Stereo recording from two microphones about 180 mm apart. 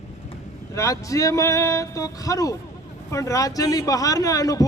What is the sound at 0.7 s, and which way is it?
A man's voice, 15° left (ahead or behind).